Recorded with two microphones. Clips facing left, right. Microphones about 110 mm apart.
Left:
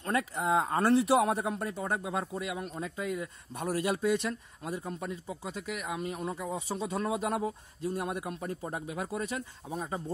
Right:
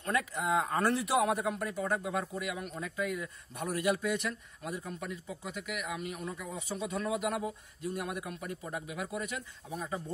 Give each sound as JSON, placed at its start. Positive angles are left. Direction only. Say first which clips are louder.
{"t": 0.0, "sound": "speech", "louder": "left 2 dB", "side_deg": 35}